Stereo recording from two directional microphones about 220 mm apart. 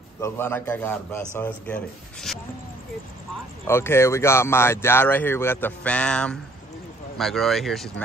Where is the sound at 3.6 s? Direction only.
10° left (ahead or behind).